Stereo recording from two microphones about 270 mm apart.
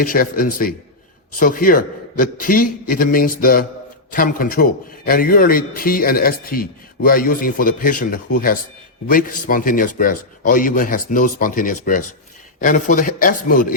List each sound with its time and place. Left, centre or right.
0.0 s a man's voice: left